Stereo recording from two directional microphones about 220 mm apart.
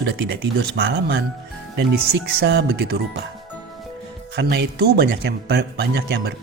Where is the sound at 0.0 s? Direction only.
50° right (ahead or behind).